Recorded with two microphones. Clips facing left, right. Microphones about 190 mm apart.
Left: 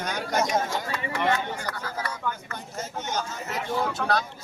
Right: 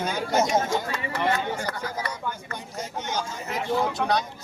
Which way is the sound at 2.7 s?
10° right (ahead or behind).